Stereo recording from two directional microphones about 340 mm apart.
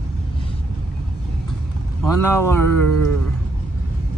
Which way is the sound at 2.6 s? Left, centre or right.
Right.